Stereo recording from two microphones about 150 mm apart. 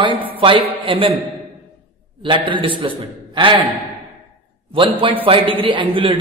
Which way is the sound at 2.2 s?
35° right (ahead or behind).